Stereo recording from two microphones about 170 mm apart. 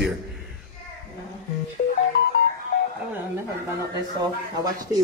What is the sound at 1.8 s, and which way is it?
Music, 70° left (ahead or behind).